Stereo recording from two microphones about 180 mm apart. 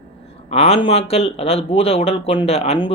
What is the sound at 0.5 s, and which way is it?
Speech, 35° left (ahead or behind).